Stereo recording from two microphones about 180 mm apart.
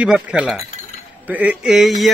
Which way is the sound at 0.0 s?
5° right (ahead or behind).